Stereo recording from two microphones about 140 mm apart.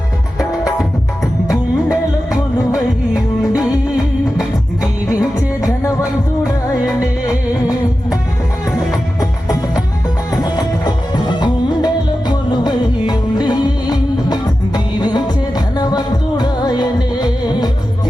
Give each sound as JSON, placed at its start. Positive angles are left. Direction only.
{"t": 1.9, "sound": "music", "side_deg": -5}
{"t": 7.3, "sound": "music", "side_deg": 25}
{"t": 10.3, "sound": "music", "side_deg": 30}